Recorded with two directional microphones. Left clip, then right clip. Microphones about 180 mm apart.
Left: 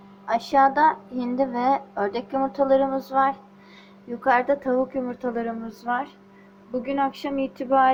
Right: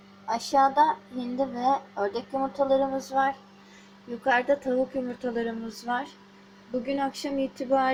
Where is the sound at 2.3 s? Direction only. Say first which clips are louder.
Left 5 dB; 5° right (ahead or behind).